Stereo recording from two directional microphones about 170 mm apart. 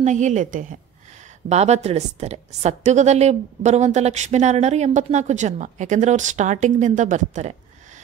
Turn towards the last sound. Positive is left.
turn(degrees=-45)  # may be behind; listen again after turning